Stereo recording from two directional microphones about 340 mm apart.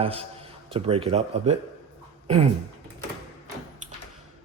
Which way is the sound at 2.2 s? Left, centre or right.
Centre.